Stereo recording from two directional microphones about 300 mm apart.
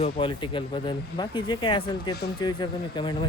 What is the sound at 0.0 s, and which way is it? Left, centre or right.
Speech, centre.